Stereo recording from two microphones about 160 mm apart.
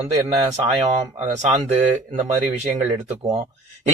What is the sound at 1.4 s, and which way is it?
Speech, 45° right (ahead or behind).